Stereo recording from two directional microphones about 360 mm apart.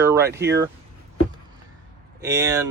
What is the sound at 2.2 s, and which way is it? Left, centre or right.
Speech, centre.